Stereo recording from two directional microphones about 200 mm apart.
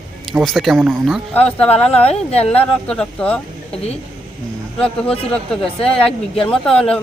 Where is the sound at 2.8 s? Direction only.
5° left (ahead or behind).